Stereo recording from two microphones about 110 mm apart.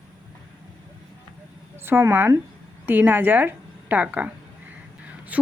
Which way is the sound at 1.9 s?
20° right (ahead or behind).